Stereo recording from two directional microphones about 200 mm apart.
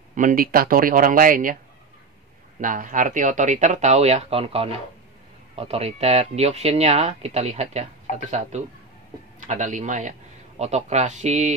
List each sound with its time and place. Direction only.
0.1 s speech: 45° right (ahead or behind)
2.6 s speech: 40° right (ahead or behind)